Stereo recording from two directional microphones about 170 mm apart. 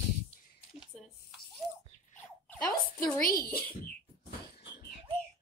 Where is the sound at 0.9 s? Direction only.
5° left (ahead or behind).